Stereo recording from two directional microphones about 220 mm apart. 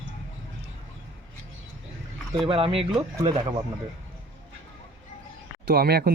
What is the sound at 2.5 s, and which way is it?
Speech, 25° right (ahead or behind).